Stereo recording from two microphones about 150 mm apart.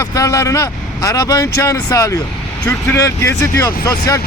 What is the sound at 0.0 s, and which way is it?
Speech, 20° left (ahead or behind).